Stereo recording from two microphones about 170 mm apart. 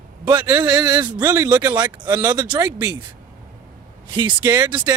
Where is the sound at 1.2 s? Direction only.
15° right (ahead or behind).